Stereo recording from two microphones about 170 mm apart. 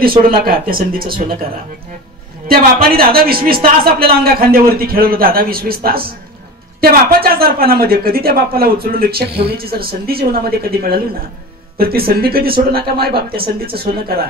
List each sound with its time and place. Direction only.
0.2 s speech: 60° right (ahead or behind)
2.4 s speech: 60° right (ahead or behind)